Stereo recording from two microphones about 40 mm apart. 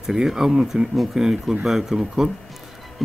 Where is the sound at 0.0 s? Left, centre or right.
Centre.